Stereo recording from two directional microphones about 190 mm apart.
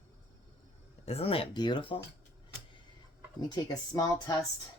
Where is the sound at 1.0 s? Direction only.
35° left (ahead or behind).